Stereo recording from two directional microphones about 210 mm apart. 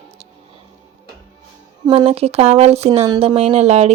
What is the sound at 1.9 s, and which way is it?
Speech, 25° right (ahead or behind).